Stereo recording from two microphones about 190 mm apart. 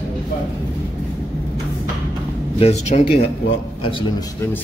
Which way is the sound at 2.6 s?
35° left (ahead or behind).